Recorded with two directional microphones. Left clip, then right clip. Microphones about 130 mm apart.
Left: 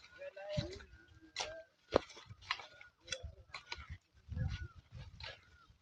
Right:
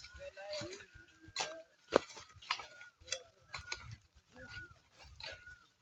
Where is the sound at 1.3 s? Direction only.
35° right (ahead or behind).